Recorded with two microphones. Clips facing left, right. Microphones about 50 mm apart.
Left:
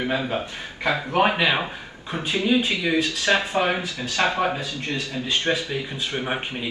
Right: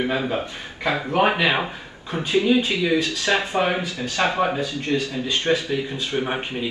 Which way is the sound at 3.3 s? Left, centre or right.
Right.